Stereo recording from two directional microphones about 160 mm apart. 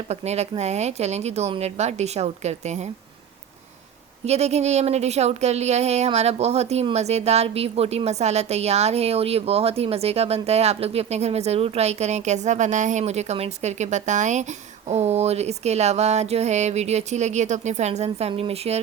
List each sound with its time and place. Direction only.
0.1 s speech: 45° right (ahead or behind)
4.3 s speech: 45° right (ahead or behind)